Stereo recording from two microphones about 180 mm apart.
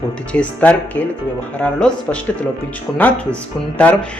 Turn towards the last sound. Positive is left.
turn(degrees=5)  # may be behind; listen again after turning